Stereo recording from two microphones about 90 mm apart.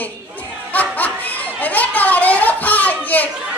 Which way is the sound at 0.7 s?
20° left (ahead or behind).